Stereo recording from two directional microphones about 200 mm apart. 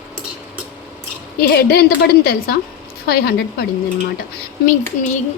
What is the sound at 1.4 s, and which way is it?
A woman's voice, 50° left (ahead or behind).